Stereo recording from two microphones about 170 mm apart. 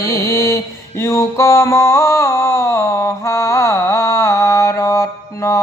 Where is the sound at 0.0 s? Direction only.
20° left (ahead or behind).